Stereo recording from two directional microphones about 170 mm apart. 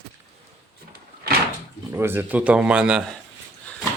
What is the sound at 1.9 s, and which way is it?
A man's voice, 15° right (ahead or behind).